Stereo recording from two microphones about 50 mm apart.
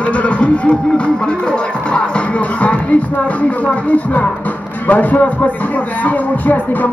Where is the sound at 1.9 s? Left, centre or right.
Left.